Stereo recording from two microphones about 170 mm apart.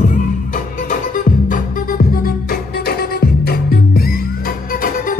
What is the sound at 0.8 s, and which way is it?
Music, 55° left (ahead or behind).